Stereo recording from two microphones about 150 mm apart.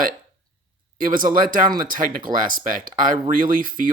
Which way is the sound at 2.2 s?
65° right (ahead or behind).